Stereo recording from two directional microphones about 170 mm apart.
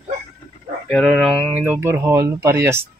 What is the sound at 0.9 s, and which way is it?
Speech, centre (ahead or behind).